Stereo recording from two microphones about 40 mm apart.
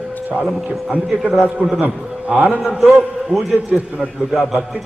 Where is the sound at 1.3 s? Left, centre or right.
Centre.